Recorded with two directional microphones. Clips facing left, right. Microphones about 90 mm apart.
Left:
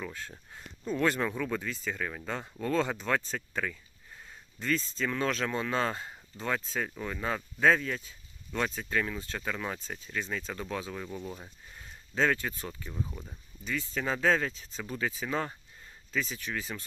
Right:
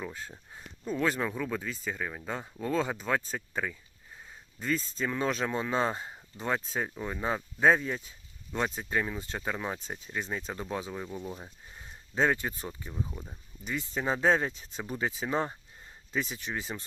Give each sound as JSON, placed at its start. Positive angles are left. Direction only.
{"t": 0.0, "sound": "speech", "side_deg": -15}
{"t": 12.9, "sound": "speech", "side_deg": -10}